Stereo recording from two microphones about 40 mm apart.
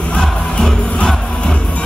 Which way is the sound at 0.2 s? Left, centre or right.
Centre.